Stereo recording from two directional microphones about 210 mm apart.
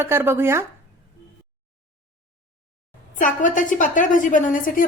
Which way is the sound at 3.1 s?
40° left (ahead or behind).